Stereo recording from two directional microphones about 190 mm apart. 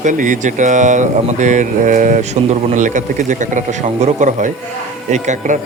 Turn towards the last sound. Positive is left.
turn(degrees=-40)  # may be behind; listen again after turning